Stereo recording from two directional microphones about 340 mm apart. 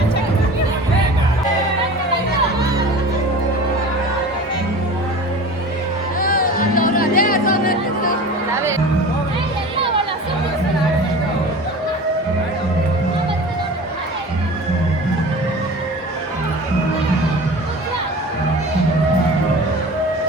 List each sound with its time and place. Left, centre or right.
6.1 s music: left